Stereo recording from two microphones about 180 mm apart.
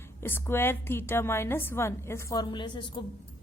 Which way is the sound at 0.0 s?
10° left (ahead or behind).